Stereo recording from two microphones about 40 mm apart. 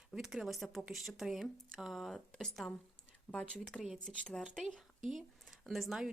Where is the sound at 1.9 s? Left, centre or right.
Centre.